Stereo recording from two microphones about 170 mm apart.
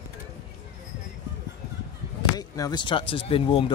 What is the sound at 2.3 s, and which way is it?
Speech, 20° left (ahead or behind).